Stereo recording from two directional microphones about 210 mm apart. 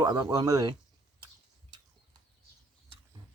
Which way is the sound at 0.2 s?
15° right (ahead or behind).